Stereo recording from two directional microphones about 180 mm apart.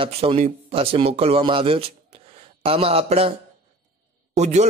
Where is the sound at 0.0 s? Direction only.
30° right (ahead or behind).